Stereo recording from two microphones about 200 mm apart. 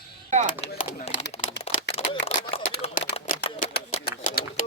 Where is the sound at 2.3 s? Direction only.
35° left (ahead or behind).